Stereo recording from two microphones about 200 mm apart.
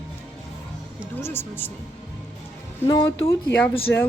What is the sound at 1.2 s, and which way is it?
Music, 10° left (ahead or behind).